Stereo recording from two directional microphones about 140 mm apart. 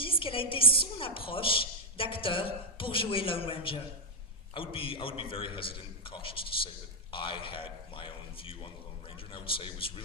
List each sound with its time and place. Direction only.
0.0 s a man's voice: 40° left (ahead or behind)